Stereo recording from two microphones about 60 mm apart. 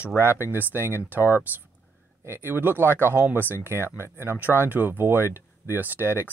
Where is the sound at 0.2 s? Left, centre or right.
Right.